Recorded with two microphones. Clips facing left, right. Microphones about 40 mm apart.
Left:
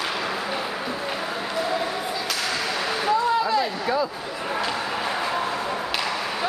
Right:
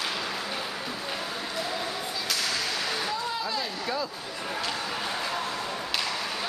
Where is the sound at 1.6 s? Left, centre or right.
Centre.